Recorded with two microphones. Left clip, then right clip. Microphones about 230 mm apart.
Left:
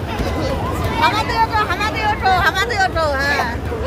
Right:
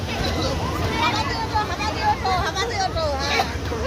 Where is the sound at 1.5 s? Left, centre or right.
Left.